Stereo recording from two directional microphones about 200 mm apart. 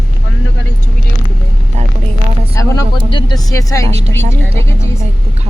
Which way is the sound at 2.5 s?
20° left (ahead or behind).